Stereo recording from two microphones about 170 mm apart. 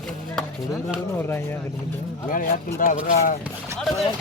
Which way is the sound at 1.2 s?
15° left (ahead or behind).